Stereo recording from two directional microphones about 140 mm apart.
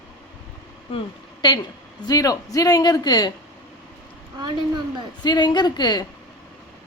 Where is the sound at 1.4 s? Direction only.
35° left (ahead or behind).